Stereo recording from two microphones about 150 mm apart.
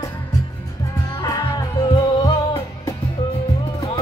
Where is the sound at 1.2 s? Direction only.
25° left (ahead or behind).